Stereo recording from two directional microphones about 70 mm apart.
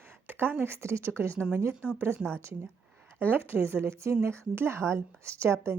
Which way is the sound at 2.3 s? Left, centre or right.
Right.